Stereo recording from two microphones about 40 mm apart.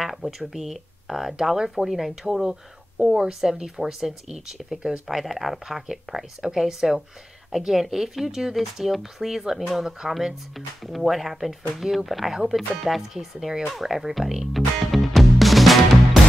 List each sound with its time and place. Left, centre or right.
0.0 s speech: centre
13.7 s music: centre